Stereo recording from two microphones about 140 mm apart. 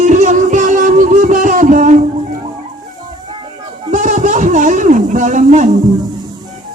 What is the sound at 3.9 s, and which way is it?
Speech, 60° right (ahead or behind).